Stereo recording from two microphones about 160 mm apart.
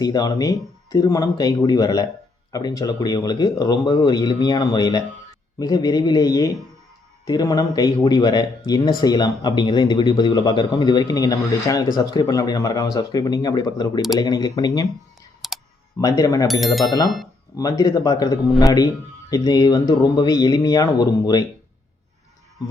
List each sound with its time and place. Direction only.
0.0 s speech: 25° left (ahead or behind)
15.4 s clicking: centre (ahead or behind)
16.0 s speech: 20° left (ahead or behind)
16.5 s speech: centre (ahead or behind)
17.6 s speech: 20° left (ahead or behind)